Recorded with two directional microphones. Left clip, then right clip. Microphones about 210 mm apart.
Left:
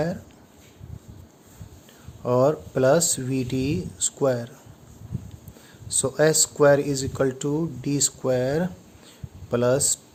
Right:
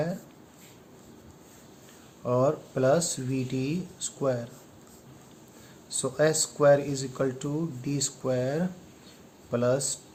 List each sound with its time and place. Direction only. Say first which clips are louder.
2.2 s a man's voice: left 5 dB; 50° left (ahead or behind)
5.9 s a man's voice: left 5 dB; 50° left (ahead or behind)